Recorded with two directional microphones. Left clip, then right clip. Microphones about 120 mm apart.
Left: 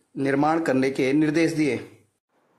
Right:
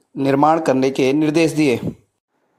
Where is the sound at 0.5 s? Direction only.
20° right (ahead or behind).